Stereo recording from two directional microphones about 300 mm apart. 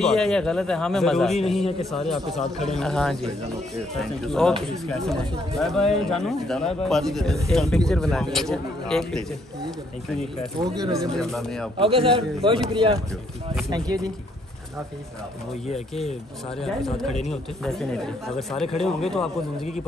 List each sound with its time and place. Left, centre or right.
0.0 s a man's voice: centre
10.6 s a man's voice: centre
11.1 s a man's voice: centre
11.8 s a man's voice: centre
15.7 s speech: left
16.6 s a man's voice: centre